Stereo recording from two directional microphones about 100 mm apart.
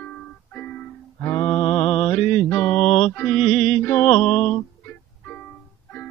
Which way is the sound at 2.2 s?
90° left.